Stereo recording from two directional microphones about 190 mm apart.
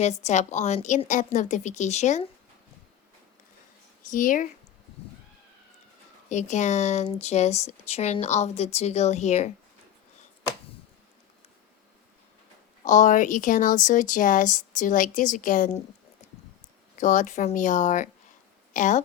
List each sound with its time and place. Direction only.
0.0 s speech: 35° left (ahead or behind)
4.1 s speech: 45° left (ahead or behind)
6.2 s speech: 40° left (ahead or behind)
12.8 s speech: 40° left (ahead or behind)
16.9 s speech: 40° left (ahead or behind)